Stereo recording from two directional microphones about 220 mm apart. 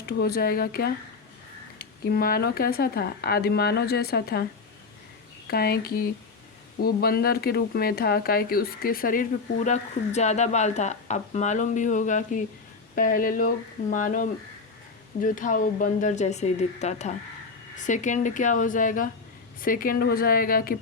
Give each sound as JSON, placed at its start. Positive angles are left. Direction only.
{"t": 0.0, "sound": "speech", "side_deg": 45}
{"t": 5.5, "sound": "speech", "side_deg": 45}